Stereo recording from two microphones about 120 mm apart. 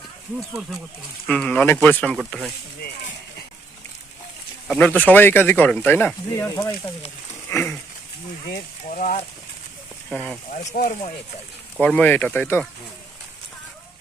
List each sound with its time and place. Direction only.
0.3 s speech: centre (ahead or behind)
1.3 s speech: 10° left (ahead or behind)
4.7 s speech: 10° left (ahead or behind)
7.5 s a sound: 20° left (ahead or behind)
8.9 s speech: 90° left
10.7 s speech: 75° left (ahead or behind)
11.8 s speech: 10° left (ahead or behind)